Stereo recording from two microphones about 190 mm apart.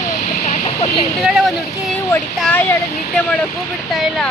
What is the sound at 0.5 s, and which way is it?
Vehicle, 30° left (ahead or behind).